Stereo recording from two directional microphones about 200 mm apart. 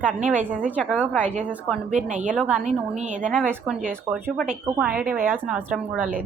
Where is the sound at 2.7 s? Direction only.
35° right (ahead or behind).